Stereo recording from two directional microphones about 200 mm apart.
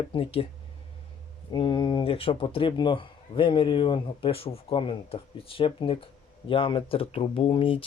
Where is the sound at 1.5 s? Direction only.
25° left (ahead or behind).